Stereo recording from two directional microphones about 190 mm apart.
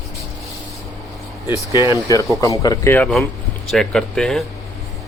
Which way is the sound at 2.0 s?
15° left (ahead or behind).